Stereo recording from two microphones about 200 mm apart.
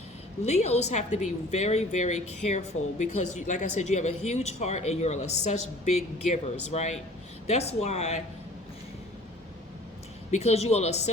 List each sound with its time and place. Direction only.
0.4 s speech: 35° left (ahead or behind)
10.3 s speech: 35° left (ahead or behind)